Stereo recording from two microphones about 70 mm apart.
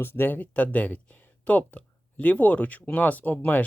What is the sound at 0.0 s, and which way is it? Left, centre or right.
Speech, left.